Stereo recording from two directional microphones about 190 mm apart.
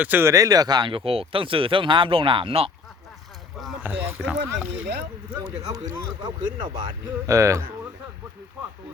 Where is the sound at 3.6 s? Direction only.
10° right (ahead or behind).